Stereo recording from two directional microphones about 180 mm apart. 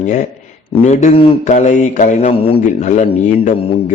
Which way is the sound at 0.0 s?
40° left (ahead or behind).